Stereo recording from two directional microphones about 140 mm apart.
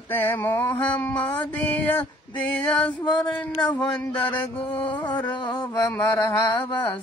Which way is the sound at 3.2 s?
10° left (ahead or behind).